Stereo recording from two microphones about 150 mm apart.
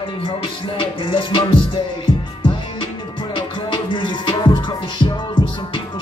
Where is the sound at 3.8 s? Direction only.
30° left (ahead or behind).